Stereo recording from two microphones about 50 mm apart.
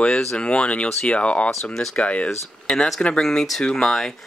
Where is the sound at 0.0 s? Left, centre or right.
Centre.